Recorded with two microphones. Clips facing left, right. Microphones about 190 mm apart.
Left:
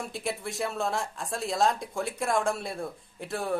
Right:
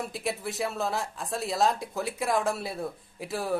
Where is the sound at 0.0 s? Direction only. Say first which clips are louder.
Right 1 dB; centre (ahead or behind).